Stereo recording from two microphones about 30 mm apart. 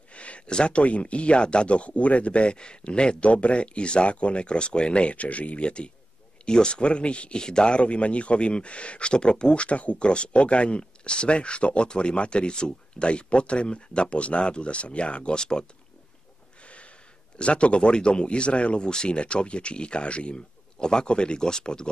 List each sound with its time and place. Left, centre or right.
0.1 s a sound: left
0.5 s speech: left
5.6 s speech: left
7.3 s speech: left
7.8 s speech: left
15.3 s speech: left
17.4 s speech: left
18.9 s speech: left
19.1 s speech: left
20.8 s speech: left